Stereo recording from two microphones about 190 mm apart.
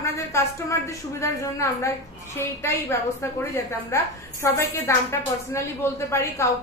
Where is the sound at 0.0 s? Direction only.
15° left (ahead or behind).